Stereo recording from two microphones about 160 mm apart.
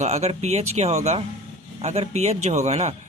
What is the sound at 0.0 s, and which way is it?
Speech, 45° right (ahead or behind).